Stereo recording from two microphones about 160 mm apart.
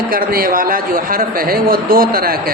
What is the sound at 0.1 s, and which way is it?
Speech, 65° right (ahead or behind).